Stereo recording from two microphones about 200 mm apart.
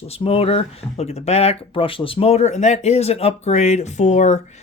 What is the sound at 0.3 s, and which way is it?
Speech, 30° left (ahead or behind).